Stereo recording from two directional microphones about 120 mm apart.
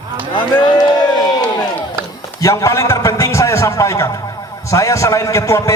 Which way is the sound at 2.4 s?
25° left (ahead or behind).